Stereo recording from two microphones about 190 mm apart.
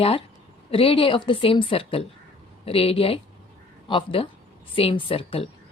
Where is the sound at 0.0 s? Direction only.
30° left (ahead or behind).